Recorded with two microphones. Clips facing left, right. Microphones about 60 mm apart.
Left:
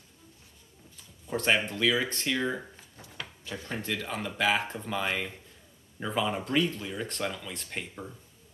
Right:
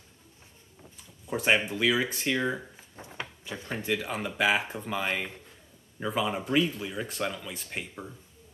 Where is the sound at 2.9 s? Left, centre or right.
Right.